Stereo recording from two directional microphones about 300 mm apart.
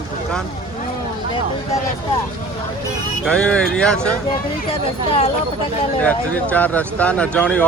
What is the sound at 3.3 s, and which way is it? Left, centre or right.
Speech, centre.